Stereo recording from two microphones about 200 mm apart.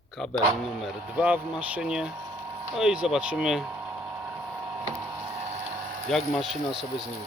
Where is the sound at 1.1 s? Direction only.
10° right (ahead or behind).